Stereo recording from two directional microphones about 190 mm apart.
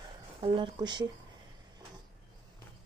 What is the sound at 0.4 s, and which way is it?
Speech, 25° right (ahead or behind).